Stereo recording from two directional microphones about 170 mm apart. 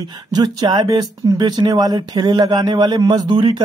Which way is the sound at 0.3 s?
25° right (ahead or behind).